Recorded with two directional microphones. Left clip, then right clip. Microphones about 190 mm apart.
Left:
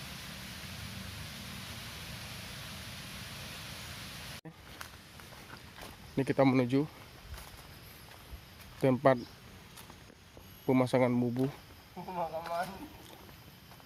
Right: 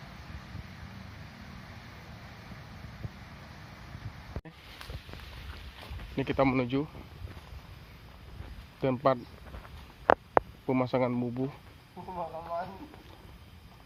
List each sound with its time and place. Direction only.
6.1 s speech: 20° left (ahead or behind)
8.8 s speech: 30° left (ahead or behind)
10.7 s speech: 20° left (ahead or behind)